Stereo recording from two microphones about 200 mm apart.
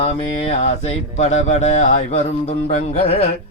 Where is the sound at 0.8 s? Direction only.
35° left (ahead or behind).